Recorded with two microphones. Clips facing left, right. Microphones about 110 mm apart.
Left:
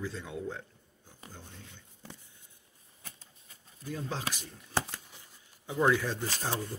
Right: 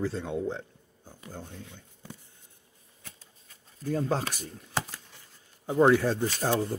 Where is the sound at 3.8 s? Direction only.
45° right (ahead or behind).